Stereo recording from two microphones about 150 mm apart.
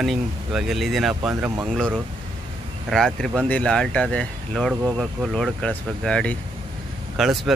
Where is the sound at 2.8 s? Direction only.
Centre (ahead or behind).